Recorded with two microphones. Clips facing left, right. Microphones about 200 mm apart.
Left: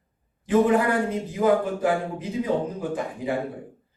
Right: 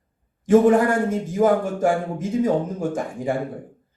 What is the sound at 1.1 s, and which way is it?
A man's voice, 45° right (ahead or behind).